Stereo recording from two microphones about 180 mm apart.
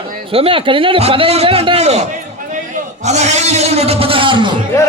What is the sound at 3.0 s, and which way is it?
A man's voice, 40° right (ahead or behind).